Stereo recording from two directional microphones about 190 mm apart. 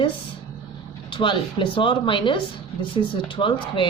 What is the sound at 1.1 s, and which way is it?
Speech, 25° left (ahead or behind).